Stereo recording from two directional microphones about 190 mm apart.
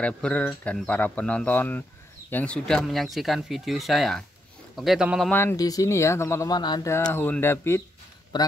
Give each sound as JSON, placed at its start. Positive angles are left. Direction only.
{"t": 0.0, "sound": "speech", "side_deg": 5}
{"t": 5.3, "sound": "speech", "side_deg": 10}
{"t": 8.3, "sound": "a man's voice", "side_deg": 25}